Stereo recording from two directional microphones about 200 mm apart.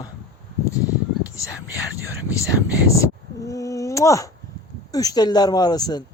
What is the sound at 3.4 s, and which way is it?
A woman's voice, 15° left (ahead or behind).